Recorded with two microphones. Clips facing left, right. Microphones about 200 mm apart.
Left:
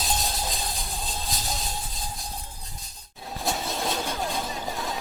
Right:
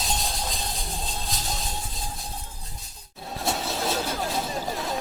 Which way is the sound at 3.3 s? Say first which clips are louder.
Right 1 dB; centre (ahead or behind).